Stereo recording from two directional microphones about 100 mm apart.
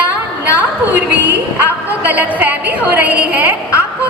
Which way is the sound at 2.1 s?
15° right (ahead or behind).